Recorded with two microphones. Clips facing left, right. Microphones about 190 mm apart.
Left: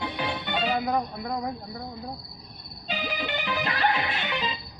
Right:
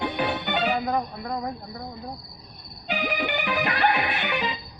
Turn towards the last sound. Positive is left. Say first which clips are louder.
# right 3 dB
turn(degrees=-15)  # may be behind; listen again after turning